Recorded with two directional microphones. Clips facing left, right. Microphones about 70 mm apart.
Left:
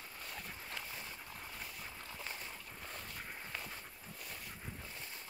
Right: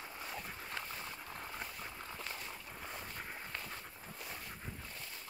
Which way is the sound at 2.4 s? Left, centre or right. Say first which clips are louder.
Right 2 dB; centre.